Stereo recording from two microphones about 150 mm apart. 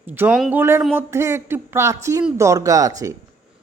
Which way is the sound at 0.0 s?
10° right (ahead or behind).